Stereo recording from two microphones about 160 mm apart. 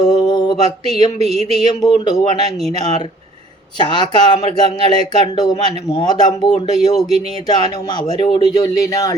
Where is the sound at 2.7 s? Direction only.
25° left (ahead or behind).